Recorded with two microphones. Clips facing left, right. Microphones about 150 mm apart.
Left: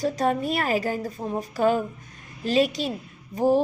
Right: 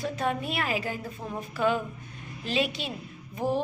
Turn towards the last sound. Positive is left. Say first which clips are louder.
# left 8 dB
turn(degrees=35)  # may be behind; listen again after turning